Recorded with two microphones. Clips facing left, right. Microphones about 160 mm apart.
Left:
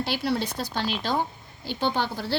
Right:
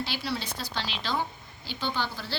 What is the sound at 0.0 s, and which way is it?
A woman's voice, 55° left (ahead or behind).